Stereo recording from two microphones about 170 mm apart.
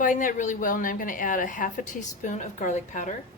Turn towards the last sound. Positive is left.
turn(degrees=45)  # may be behind; listen again after turning